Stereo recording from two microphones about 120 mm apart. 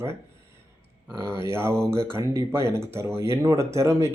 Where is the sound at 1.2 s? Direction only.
20° right (ahead or behind).